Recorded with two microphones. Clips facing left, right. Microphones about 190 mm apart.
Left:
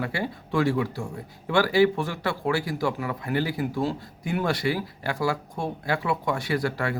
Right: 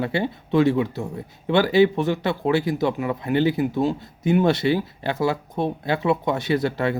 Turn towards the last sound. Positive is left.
turn(degrees=-20)  # may be behind; listen again after turning